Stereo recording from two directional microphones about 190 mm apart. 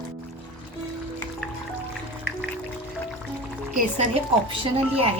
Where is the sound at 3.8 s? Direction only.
35° right (ahead or behind).